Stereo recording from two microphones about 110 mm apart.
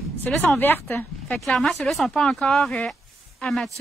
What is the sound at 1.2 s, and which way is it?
Speech, 5° left (ahead or behind).